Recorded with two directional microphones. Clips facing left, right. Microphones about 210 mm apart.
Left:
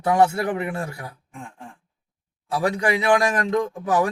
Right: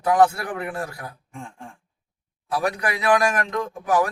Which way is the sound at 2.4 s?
25° left (ahead or behind).